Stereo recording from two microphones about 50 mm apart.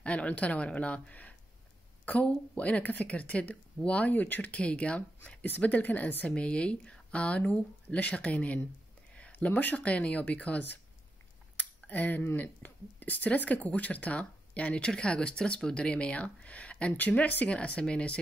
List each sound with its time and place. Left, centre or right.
0.0 s speech: left
6.3 s speech: left
9.3 s speech: left
11.9 s speech: left